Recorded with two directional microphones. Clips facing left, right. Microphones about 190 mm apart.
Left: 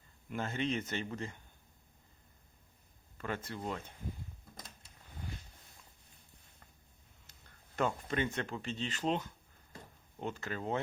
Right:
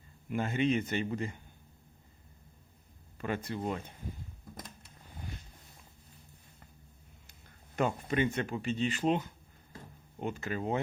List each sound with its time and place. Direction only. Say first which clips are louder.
0.3 s speech: right 6 dB; 15° right (ahead or behind)
3.2 s speech: right 5 dB; 15° right (ahead or behind)
7.8 s speech: right 4 dB; 15° right (ahead or behind)